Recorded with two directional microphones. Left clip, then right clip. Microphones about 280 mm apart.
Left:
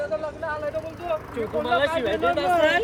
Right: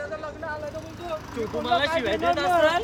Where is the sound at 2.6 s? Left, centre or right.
Right.